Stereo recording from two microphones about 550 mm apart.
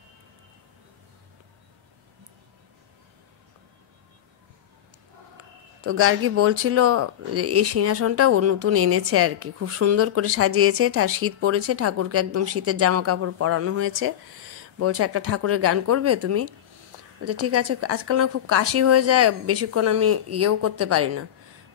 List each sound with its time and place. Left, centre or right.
5.9 s speech: right